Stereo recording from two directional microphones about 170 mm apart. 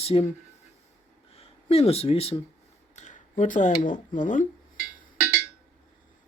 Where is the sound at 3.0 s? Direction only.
45° left (ahead or behind).